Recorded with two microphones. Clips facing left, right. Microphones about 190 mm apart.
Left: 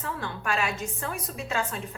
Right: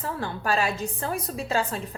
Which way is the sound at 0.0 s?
35° right (ahead or behind).